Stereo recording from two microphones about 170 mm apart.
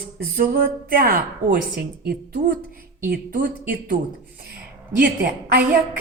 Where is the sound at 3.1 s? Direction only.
55° right (ahead or behind).